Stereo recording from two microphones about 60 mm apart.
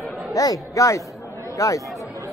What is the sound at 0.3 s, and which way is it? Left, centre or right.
Speech, left.